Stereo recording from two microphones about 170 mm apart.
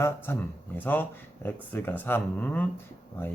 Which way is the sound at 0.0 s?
15° left (ahead or behind).